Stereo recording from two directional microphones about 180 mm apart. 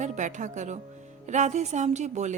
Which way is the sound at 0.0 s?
45° right (ahead or behind).